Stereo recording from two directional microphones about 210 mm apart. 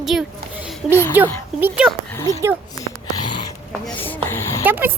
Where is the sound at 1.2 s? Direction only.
10° right (ahead or behind).